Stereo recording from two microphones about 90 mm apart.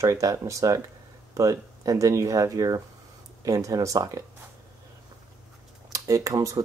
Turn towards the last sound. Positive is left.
turn(degrees=-40)  # may be behind; listen again after turning